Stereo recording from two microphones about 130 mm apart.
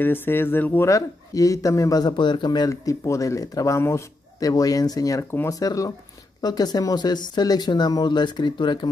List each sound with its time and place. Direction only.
0.0 s speech: 15° left (ahead or behind)
0.8 s speech: 25° left (ahead or behind)